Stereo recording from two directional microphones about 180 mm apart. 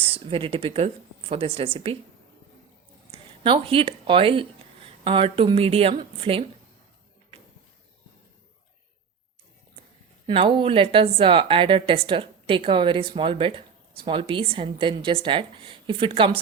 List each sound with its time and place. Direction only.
0.0 s speech: 30° right (ahead or behind)
3.1 s speech: 30° right (ahead or behind)
10.2 s speech: 30° right (ahead or behind)